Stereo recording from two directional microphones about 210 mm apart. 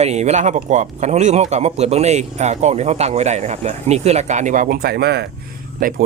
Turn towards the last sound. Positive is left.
turn(degrees=-40)  # may be behind; listen again after turning